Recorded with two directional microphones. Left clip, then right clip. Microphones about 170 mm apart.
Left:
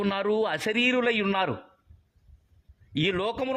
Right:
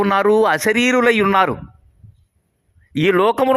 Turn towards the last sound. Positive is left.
turn(degrees=-40)  # may be behind; listen again after turning